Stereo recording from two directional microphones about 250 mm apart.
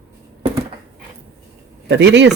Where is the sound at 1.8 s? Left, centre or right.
Right.